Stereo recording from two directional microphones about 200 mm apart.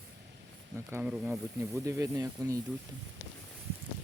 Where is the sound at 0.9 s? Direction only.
5° right (ahead or behind).